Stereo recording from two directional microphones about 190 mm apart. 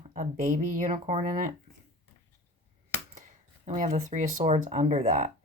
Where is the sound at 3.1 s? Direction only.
45° right (ahead or behind).